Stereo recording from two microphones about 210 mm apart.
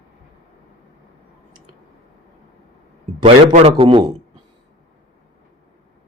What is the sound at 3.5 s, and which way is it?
Speech, 30° right (ahead or behind).